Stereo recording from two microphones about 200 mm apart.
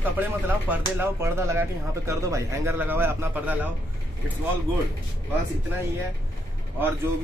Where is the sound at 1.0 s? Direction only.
10° right (ahead or behind).